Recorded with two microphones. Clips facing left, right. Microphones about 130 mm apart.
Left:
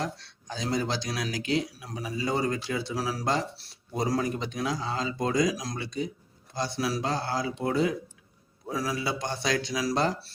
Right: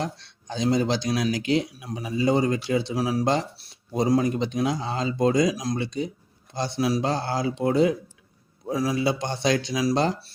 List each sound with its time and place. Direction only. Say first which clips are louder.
0.0 s speech: right 3 dB; 25° right (ahead or behind)